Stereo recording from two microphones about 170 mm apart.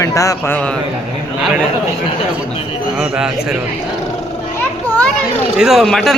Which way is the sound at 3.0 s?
5° right (ahead or behind).